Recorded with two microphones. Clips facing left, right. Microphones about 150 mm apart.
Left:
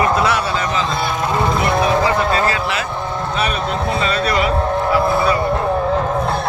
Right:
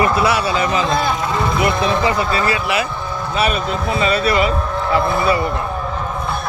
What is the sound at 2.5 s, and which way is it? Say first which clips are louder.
A man's voice: right 1 dB; 10° right (ahead or behind).